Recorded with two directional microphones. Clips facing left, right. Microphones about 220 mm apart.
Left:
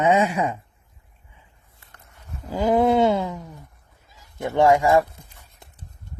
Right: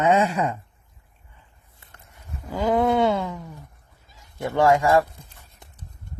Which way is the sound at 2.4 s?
25° left (ahead or behind).